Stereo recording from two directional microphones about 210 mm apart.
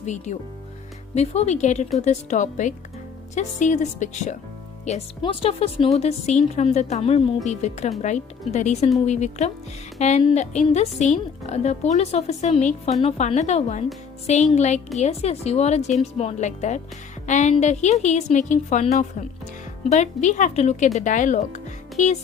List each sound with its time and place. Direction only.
0.0 s a woman's voice: 35° left (ahead or behind)